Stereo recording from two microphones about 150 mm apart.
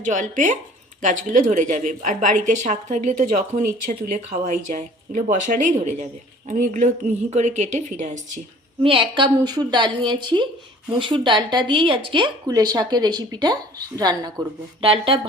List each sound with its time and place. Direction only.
0.0 s a woman's voice: 55° right (ahead or behind)
8.8 s a woman's voice: 35° right (ahead or behind)
14.8 s a woman's voice: 35° right (ahead or behind)